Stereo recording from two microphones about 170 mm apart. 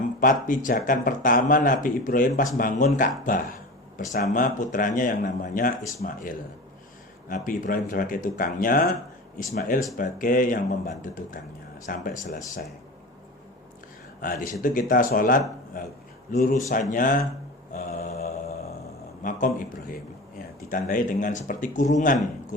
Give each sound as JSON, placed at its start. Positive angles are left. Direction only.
{"t": 0.2, "sound": "speech", "side_deg": 50}
{"t": 4.1, "sound": "speech", "side_deg": 55}
{"t": 14.2, "sound": "speech", "side_deg": 55}
{"t": 17.7, "sound": "mantra", "side_deg": 45}
{"t": 19.2, "sound": "speech", "side_deg": 50}
{"t": 20.7, "sound": "speech", "side_deg": 50}